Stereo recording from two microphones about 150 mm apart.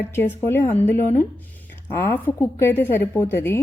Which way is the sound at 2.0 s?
15° left (ahead or behind).